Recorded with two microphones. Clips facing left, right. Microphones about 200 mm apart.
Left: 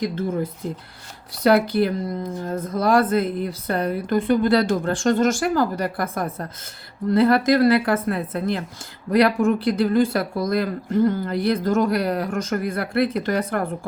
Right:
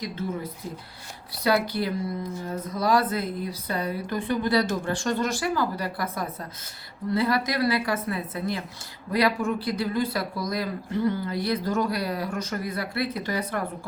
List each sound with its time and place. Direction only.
1.5 s speech: 55° left (ahead or behind)